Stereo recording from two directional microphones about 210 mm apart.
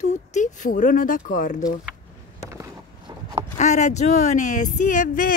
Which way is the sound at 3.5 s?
35° left (ahead or behind).